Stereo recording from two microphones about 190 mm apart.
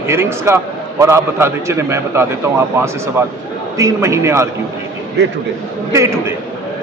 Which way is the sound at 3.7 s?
15° right (ahead or behind).